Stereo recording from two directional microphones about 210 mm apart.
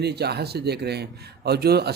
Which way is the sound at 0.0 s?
50° right (ahead or behind).